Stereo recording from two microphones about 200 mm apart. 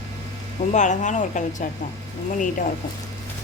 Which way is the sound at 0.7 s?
35° left (ahead or behind).